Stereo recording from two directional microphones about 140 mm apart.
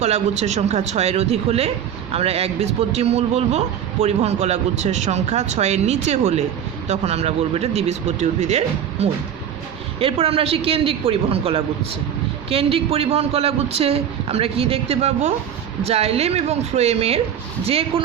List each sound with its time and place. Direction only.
0.0 s a man's voice: 55° right (ahead or behind)